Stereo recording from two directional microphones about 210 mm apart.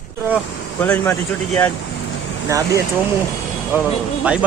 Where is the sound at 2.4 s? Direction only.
15° right (ahead or behind).